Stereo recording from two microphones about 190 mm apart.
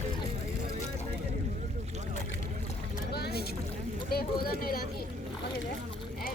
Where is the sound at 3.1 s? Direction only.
55° left (ahead or behind).